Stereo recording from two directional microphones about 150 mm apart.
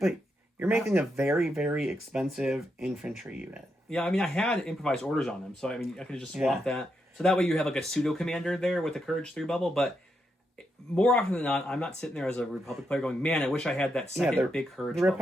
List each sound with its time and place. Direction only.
0.6 s speech: 5° right (ahead or behind)
0.9 s speech: 20° right (ahead or behind)
1.3 s speech: 5° right (ahead or behind)
3.8 s speech: 5° left (ahead or behind)
10.9 s speech: 5° left (ahead or behind)